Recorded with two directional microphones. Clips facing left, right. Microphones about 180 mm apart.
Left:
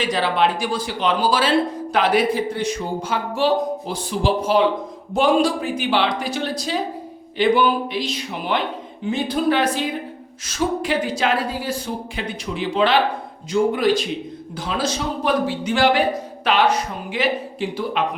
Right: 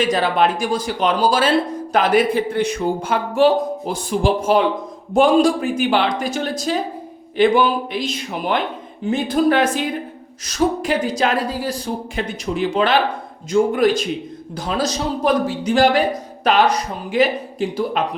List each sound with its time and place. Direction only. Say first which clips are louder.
0.0 s a woman's voice: right 3 dB; 45° right (ahead or behind)